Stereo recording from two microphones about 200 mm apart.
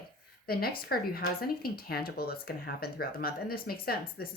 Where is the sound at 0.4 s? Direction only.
50° left (ahead or behind).